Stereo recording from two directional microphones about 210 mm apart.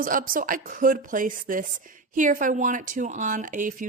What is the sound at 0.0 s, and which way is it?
A woman's voice, 40° right (ahead or behind).